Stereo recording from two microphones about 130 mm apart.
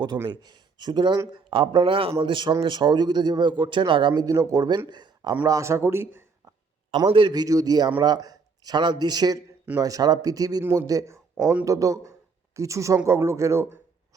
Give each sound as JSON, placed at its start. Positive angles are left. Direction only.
{"t": 0.3, "sound": "a man's voice", "side_deg": -35}
{"t": 5.5, "sound": "speech", "side_deg": -25}
{"t": 6.9, "sound": "a man's voice", "side_deg": -40}